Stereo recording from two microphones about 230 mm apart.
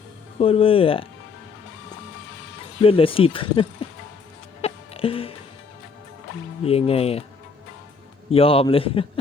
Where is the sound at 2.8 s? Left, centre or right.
Left.